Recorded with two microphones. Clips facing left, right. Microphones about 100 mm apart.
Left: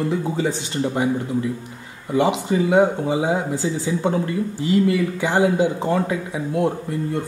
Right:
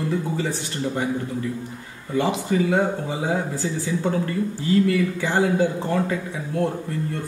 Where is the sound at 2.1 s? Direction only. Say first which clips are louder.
Left 3 dB; 20° left (ahead or behind).